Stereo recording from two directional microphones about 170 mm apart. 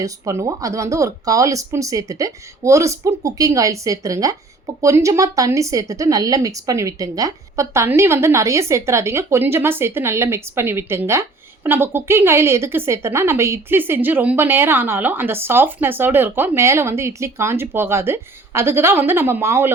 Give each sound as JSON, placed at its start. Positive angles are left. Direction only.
{"t": 0.0, "sound": "speech", "side_deg": -20}